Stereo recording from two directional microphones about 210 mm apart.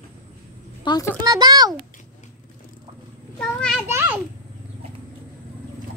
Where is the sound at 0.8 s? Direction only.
20° left (ahead or behind).